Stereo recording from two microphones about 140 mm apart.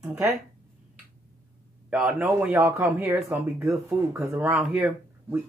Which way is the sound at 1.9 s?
10° right (ahead or behind).